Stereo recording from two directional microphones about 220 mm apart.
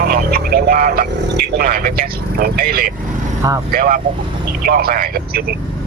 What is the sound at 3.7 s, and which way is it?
Speech, 40° right (ahead or behind).